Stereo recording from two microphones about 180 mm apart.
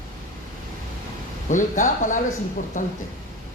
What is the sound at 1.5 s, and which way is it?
Speech, 45° left (ahead or behind).